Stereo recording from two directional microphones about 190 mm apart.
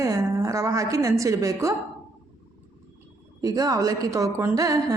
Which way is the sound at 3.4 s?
20° right (ahead or behind).